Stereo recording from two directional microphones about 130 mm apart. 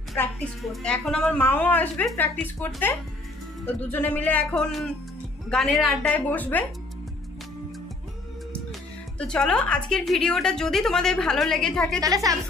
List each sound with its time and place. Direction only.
0.6 s a woman's voice: centre (ahead or behind)
6.1 s a woman's voice: 15° left (ahead or behind)
9.2 s a woman's voice: 5° left (ahead or behind)
12.0 s a woman's voice: 25° right (ahead or behind)